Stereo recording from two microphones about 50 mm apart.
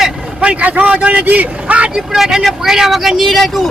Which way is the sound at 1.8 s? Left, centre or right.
Centre.